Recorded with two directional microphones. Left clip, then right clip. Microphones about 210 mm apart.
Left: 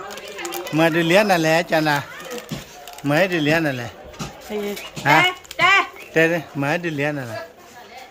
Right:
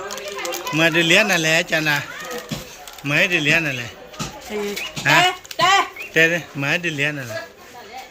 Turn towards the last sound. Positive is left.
turn(degrees=20)  # may be behind; listen again after turning